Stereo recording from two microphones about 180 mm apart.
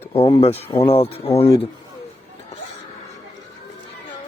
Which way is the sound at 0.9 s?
30° left (ahead or behind).